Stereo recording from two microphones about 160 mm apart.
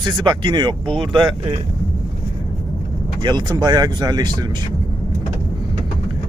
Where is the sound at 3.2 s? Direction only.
25° right (ahead or behind).